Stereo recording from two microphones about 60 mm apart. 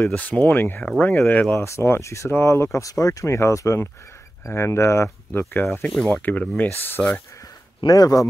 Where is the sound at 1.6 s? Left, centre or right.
Left.